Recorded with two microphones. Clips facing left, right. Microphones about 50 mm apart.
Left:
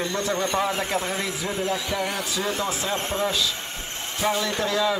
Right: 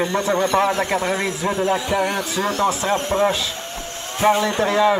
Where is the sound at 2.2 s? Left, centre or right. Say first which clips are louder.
Right 6 dB; right.